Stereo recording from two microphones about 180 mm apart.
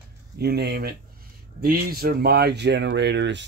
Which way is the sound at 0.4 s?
65° right (ahead or behind).